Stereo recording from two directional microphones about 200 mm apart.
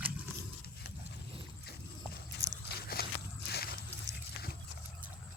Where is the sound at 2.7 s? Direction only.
50° left (ahead or behind).